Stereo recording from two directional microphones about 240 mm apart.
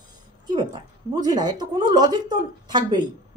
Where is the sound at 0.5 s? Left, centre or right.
Centre.